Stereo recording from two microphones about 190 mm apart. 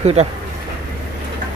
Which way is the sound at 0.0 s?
35° right (ahead or behind).